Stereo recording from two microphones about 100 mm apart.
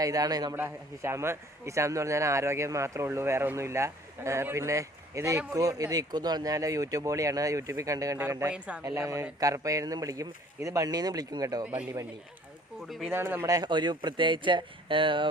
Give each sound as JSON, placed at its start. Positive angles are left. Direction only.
{"t": 0.0, "sound": "speech", "side_deg": -40}
{"t": 0.5, "sound": "speech", "side_deg": -25}
{"t": 8.4, "sound": "speech", "side_deg": -10}
{"t": 8.8, "sound": "speech", "side_deg": -35}
{"t": 13.5, "sound": "speech", "side_deg": -45}